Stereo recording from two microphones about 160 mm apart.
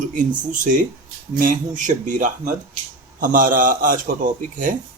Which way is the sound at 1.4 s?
55° right (ahead or behind).